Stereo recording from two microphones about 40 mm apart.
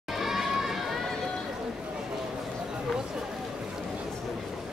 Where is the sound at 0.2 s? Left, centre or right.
Centre.